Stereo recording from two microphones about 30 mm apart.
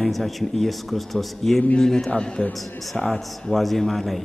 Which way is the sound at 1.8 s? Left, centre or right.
Centre.